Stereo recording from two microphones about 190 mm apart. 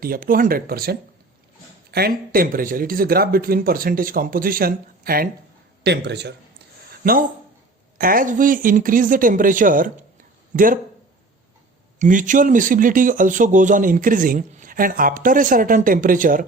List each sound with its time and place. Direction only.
0.0 s speech: 50° right (ahead or behind)
5.8 s speech: 60° right (ahead or behind)
7.0 s speech: 50° right (ahead or behind)
11.9 s speech: 40° right (ahead or behind)